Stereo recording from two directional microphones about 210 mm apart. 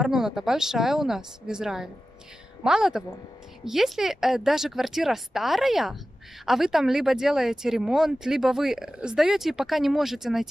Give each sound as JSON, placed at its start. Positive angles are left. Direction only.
{"t": 0.0, "sound": "speech", "side_deg": 0}